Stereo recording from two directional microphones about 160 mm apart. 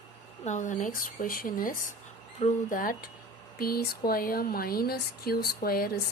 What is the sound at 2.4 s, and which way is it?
Speech, 40° left (ahead or behind).